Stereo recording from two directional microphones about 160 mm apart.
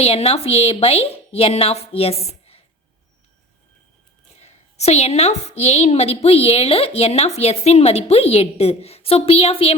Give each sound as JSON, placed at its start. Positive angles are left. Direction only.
{"t": 0.0, "sound": "a woman's voice", "side_deg": 40}
{"t": 4.4, "sound": "a woman's voice", "side_deg": 45}